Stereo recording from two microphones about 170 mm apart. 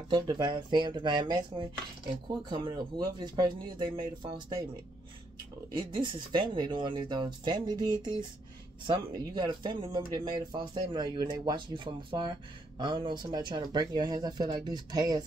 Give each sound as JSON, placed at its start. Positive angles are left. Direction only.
{"t": 0.1, "sound": "speech", "side_deg": -25}
{"t": 5.9, "sound": "speech", "side_deg": -25}